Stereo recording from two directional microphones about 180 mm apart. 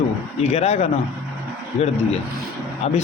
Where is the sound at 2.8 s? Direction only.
35° left (ahead or behind).